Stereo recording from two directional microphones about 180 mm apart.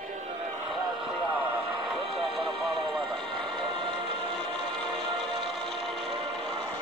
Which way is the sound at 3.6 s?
30° right (ahead or behind).